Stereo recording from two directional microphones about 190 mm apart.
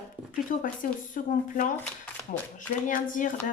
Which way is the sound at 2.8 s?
45° left (ahead or behind).